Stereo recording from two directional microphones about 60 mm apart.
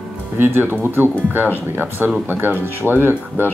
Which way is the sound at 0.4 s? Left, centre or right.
Right.